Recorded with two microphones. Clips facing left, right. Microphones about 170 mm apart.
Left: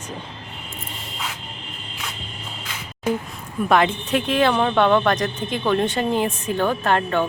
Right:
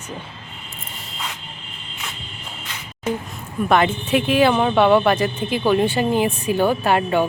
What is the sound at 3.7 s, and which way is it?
Speech, 5° right (ahead or behind).